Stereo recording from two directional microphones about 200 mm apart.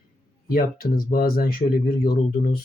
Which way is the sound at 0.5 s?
45° left (ahead or behind).